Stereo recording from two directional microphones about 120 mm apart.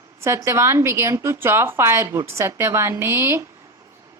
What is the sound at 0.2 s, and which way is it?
A woman's voice, 25° right (ahead or behind).